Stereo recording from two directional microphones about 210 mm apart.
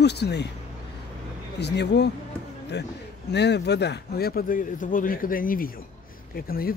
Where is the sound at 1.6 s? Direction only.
55° left (ahead or behind).